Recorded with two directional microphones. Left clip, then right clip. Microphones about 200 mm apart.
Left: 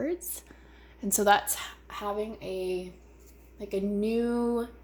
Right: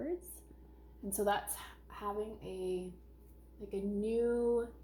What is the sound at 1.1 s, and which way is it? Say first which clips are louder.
A woman's voice: left 11 dB; 45° left (ahead or behind).